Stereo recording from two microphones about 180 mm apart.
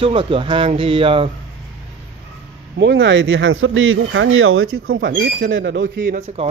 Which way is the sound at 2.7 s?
90° right.